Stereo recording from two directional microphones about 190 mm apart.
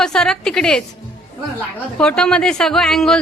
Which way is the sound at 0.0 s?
5° left (ahead or behind).